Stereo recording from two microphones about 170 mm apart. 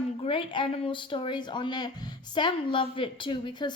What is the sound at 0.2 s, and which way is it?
Speech, 30° left (ahead or behind).